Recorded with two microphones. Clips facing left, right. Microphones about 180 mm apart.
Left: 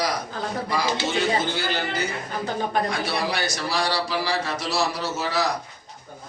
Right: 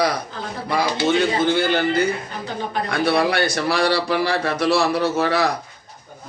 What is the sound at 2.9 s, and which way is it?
A man's voice, 60° right (ahead or behind).